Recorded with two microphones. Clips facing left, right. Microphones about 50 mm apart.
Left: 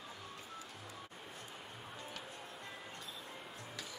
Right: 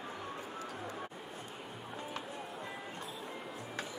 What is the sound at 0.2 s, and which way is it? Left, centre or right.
Music, right.